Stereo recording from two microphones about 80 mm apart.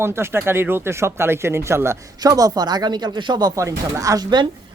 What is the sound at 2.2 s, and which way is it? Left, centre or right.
Speech, right.